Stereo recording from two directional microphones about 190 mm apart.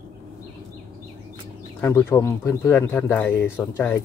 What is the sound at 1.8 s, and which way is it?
Speech, 15° left (ahead or behind).